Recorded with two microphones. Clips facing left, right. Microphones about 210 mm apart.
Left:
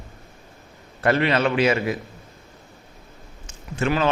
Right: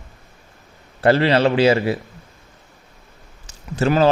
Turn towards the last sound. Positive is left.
turn(degrees=-35)  # may be behind; listen again after turning